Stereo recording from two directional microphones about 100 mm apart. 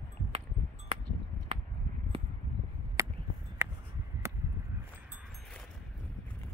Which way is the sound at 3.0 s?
30° right (ahead or behind).